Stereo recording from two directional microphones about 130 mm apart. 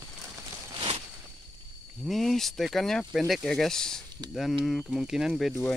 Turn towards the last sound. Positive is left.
turn(degrees=0)  # may be behind; listen again after turning